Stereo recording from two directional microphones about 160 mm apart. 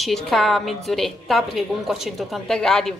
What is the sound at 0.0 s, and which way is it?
A woman's voice, centre (ahead or behind).